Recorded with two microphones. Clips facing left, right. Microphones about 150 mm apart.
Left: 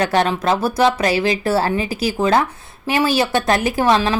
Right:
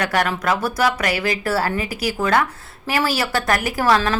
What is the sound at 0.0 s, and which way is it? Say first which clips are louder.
A woman's voice: left 4 dB; 30° left (ahead or behind).